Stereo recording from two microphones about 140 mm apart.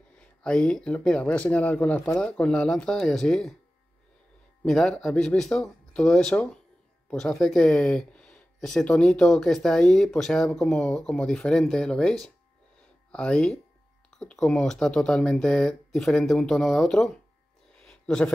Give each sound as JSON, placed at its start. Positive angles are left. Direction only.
{"t": 0.1, "sound": "speech", "side_deg": 5}
{"t": 4.6, "sound": "speech", "side_deg": 5}
{"t": 17.8, "sound": "a sound", "side_deg": 5}